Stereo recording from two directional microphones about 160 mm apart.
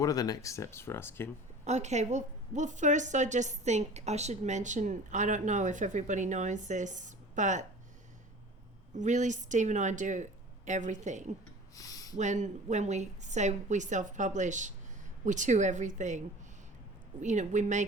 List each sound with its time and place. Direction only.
0.0 s speech: 20° left (ahead or behind)
1.6 s a woman's voice: 45° right (ahead or behind)
9.0 s a woman's voice: 50° right (ahead or behind)
11.7 s a sound: 20° left (ahead or behind)
12.1 s a woman's voice: 45° right (ahead or behind)